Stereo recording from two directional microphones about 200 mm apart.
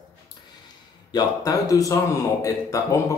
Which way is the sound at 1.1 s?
20° left (ahead or behind).